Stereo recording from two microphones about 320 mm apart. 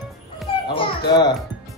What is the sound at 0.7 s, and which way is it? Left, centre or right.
Speech, centre.